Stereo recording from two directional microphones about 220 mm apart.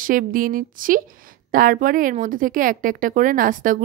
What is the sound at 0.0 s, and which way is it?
A woman's voice, 40° right (ahead or behind).